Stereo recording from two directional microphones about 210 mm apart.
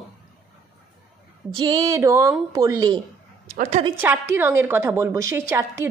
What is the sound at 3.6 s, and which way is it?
Speech, 30° right (ahead or behind).